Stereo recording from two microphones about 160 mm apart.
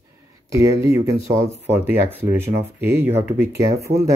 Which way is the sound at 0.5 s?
20° right (ahead or behind).